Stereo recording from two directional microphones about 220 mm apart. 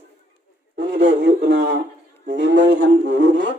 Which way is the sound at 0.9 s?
50° right (ahead or behind).